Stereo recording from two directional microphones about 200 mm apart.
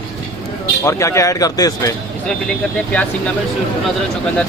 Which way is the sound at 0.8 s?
15° left (ahead or behind).